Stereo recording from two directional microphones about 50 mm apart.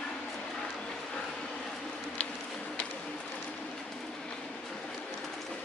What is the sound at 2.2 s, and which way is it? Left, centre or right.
Insect, left.